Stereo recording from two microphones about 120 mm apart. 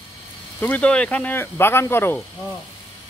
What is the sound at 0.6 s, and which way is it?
Speech, 10° left (ahead or behind).